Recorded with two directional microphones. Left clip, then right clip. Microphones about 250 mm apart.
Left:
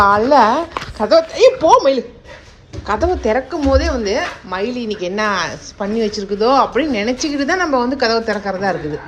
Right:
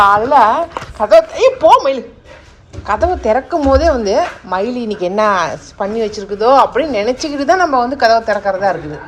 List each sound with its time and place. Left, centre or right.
0.1 s speech: centre
0.3 s speech: centre